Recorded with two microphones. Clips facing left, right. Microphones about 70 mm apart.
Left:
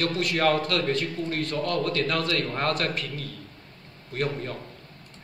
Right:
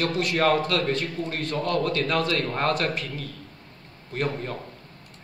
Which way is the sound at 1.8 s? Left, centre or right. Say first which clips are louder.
Right 2 dB; centre.